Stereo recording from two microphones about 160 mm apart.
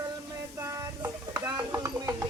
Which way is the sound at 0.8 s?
20° right (ahead or behind).